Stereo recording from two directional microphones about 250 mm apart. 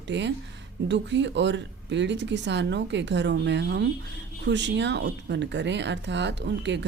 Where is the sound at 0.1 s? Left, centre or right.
Right.